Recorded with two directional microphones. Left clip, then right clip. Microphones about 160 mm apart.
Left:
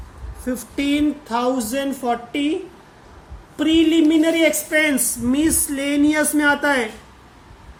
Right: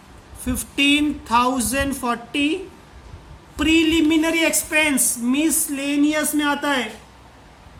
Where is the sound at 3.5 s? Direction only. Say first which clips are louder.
Left 1 dB; 80° right.